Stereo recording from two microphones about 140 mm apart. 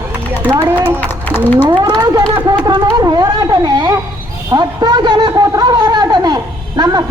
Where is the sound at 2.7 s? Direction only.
30° right (ahead or behind).